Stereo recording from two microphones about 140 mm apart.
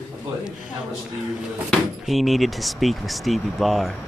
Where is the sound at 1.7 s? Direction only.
Centre (ahead or behind).